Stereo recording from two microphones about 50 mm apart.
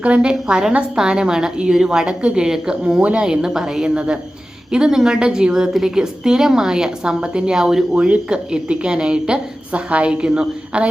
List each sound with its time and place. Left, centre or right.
0.0 s a woman's voice: right
3.8 s a woman's voice: right
7.9 s a woman's voice: right
10.7 s a woman's voice: right